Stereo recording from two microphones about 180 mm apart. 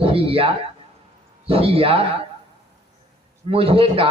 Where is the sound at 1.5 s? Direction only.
30° right (ahead or behind).